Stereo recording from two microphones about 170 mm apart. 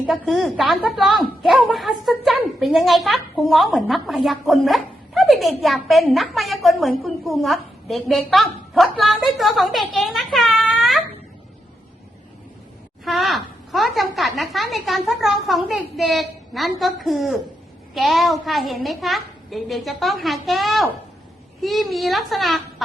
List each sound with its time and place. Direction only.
0.0 s a woman's voice: centre (ahead or behind)
13.1 s a woman's voice: centre (ahead or behind)